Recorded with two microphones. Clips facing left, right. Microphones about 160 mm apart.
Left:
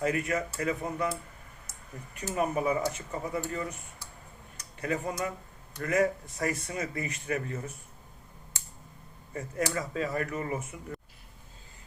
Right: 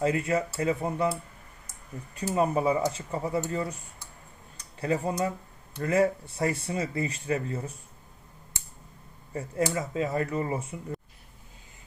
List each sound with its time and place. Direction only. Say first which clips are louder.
0.0 s speech: right 3 dB; 25° right (ahead or behind)
2.3 s speech: right 3 dB; 30° right (ahead or behind)
9.3 s speech: right 3 dB; 25° right (ahead or behind)